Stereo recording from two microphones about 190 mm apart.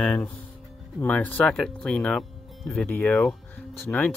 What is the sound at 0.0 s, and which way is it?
Speech, 5° left (ahead or behind).